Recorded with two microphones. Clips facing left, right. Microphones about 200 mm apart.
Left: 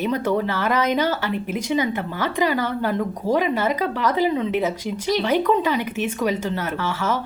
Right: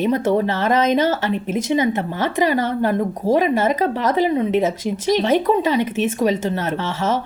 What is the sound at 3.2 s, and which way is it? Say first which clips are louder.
Speech: right 4 dB; 15° left (ahead or behind).